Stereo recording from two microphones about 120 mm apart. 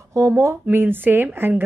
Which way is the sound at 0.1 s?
25° right (ahead or behind).